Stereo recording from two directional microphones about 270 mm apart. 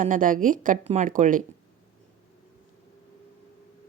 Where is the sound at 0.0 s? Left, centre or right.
Right.